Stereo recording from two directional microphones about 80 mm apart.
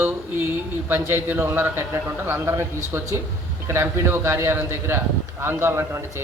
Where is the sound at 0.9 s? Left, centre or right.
Right.